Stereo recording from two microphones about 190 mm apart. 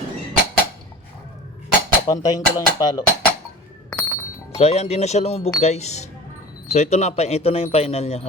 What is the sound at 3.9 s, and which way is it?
Music, 10° left (ahead or behind).